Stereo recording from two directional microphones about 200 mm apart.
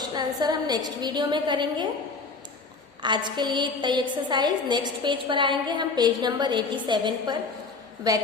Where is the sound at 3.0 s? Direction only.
20° right (ahead or behind).